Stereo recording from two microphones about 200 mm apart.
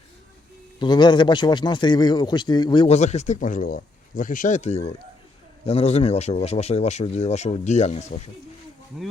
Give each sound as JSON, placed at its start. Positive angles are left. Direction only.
{"t": 0.8, "sound": "speech", "side_deg": 20}
{"t": 8.9, "sound": "speech", "side_deg": 0}